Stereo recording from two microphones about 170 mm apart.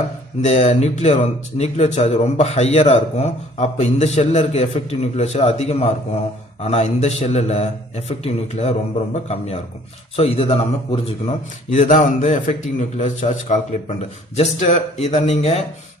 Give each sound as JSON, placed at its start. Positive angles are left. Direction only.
{"t": 0.4, "sound": "speech", "side_deg": 40}
{"t": 11.7, "sound": "a man's voice", "side_deg": 45}